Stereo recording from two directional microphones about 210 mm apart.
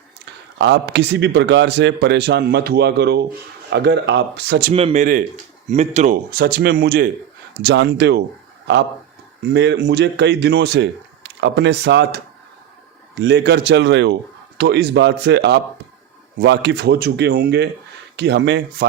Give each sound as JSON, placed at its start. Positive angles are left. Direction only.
{"t": 0.6, "sound": "a man's voice", "side_deg": -55}
{"t": 4.7, "sound": "speech", "side_deg": -30}
{"t": 9.4, "sound": "a man's voice", "side_deg": -55}